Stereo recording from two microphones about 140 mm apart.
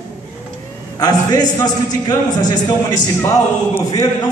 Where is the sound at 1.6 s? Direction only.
30° left (ahead or behind).